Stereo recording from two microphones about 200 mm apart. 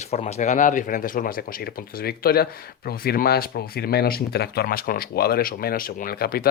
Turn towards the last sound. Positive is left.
turn(degrees=50)  # may be behind; listen again after turning